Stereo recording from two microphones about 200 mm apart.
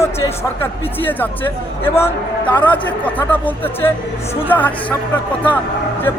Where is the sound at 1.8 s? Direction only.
10° left (ahead or behind).